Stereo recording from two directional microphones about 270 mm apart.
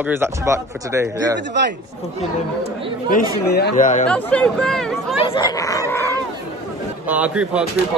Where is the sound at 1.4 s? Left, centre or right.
Right.